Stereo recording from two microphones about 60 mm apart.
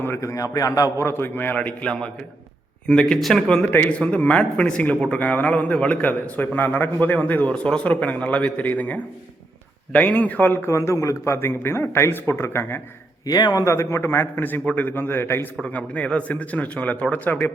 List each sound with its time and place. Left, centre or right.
0.2 s a man's voice: left
1.0 s a man's voice: left
1.5 s a man's voice: centre
3.8 s a man's voice: left
5.2 s a man's voice: left
10.7 s a man's voice: left
11.3 s a man's voice: left
13.2 s a man's voice: left
15.6 s a man's voice: left